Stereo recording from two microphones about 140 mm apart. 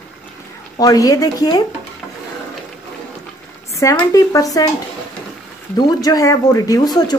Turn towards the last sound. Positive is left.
turn(degrees=30)  # may be behind; listen again after turning